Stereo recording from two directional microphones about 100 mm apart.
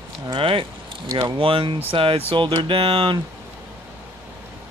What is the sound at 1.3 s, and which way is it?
Speech, 60° right (ahead or behind).